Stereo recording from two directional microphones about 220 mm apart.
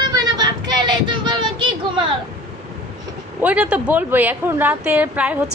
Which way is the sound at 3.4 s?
5° right (ahead or behind).